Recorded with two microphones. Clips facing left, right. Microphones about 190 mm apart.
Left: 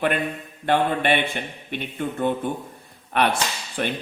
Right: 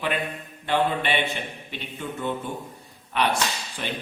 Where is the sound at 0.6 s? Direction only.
55° left (ahead or behind).